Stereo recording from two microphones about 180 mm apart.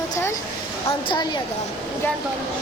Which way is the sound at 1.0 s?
25° left (ahead or behind).